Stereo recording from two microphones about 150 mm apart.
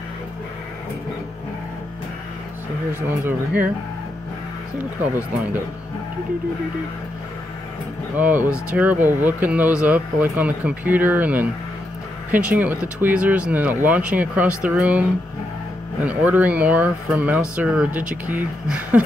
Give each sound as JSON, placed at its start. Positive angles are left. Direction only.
{"t": 2.9, "sound": "speech", "side_deg": -15}
{"t": 4.7, "sound": "speech", "side_deg": -10}
{"t": 8.2, "sound": "speech", "side_deg": -10}